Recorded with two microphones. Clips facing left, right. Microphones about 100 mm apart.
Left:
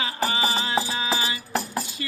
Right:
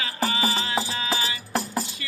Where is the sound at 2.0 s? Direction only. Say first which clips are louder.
Left 5 dB; 30° left (ahead or behind).